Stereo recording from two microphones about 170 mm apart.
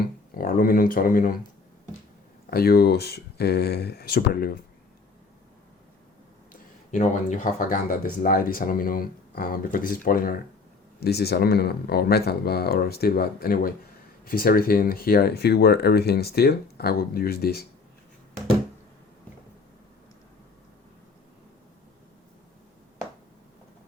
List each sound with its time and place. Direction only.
0.0 s speech: 55° left (ahead or behind)
2.5 s speech: 65° left (ahead or behind)
6.5 s speech: 50° left (ahead or behind)
11.0 s speech: 70° left (ahead or behind)